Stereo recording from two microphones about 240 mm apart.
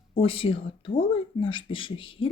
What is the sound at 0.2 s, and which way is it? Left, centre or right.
Speech, left.